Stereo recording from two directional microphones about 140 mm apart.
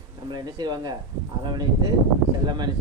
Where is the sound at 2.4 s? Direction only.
30° right (ahead or behind).